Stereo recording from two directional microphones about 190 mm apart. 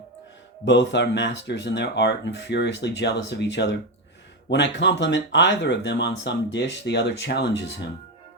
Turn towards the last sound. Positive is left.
turn(degrees=65)  # may be behind; listen again after turning